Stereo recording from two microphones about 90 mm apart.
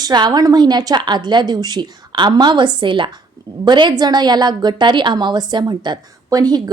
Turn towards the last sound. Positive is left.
turn(degrees=-45)  # may be behind; listen again after turning